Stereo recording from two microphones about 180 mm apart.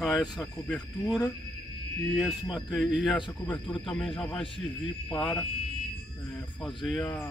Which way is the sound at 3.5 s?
30° left (ahead or behind).